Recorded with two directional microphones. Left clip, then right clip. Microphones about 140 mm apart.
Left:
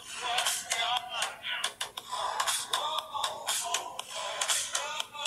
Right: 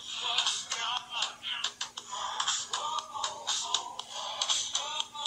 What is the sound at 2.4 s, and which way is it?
Music, 35° left (ahead or behind).